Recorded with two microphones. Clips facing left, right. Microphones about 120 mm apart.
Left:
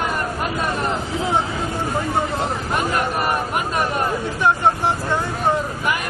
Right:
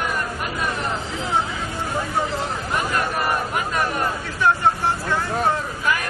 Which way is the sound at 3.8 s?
20° left (ahead or behind).